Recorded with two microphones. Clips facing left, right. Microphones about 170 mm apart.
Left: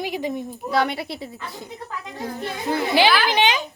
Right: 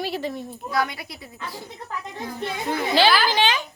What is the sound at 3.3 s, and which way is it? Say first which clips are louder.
Speech: left 2 dB; 20° left (ahead or behind).